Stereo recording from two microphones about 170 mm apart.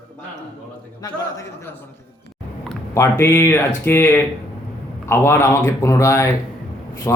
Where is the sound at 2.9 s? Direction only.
15° left (ahead or behind).